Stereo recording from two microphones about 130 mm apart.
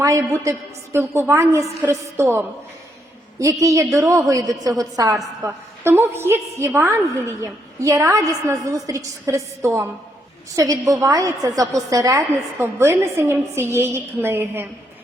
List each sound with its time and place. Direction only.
0.0 s a woman's voice: 25° right (ahead or behind)
3.3 s a woman's voice: 25° right (ahead or behind)